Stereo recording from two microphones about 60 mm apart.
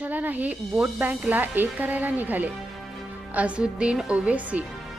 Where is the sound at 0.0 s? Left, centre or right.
Right.